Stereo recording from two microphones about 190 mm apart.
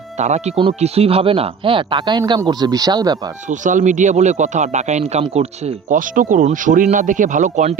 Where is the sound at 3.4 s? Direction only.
40° right (ahead or behind).